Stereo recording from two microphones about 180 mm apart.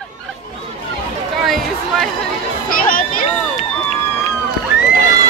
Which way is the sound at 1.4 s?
Centre (ahead or behind).